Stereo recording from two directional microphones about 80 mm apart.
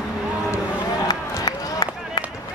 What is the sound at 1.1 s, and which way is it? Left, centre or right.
Run, left.